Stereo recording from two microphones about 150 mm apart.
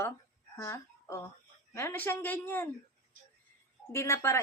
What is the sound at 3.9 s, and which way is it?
Speech, 20° left (ahead or behind).